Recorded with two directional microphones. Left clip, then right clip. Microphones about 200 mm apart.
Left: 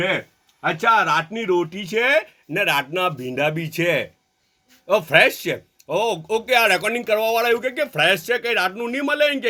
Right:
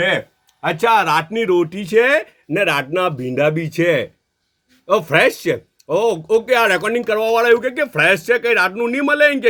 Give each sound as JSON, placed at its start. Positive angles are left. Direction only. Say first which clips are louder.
{"t": 0.6, "sound": "speech", "louder": "right 3 dB", "side_deg": -60}